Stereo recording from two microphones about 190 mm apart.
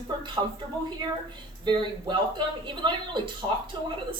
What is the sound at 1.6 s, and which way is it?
Speech, 25° right (ahead or behind).